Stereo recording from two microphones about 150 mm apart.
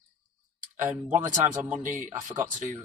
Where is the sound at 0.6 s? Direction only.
60° right (ahead or behind).